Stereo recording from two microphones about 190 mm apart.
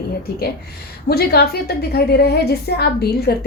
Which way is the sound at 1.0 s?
55° left (ahead or behind).